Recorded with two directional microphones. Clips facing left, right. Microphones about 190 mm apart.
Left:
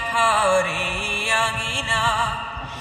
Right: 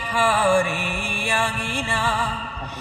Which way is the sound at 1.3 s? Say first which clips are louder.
Right 2 dB; 15° right (ahead or behind).